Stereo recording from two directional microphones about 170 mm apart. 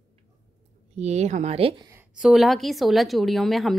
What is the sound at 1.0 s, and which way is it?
Speech, 40° right (ahead or behind).